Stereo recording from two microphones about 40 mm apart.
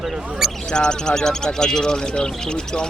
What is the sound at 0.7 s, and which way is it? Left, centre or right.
Speech, centre.